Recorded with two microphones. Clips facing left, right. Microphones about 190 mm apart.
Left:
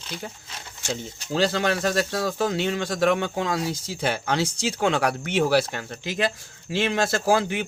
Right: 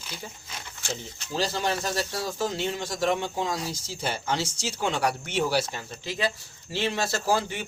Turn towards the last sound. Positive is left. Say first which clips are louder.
# left 5 dB
turn(degrees=55)  # may be behind; listen again after turning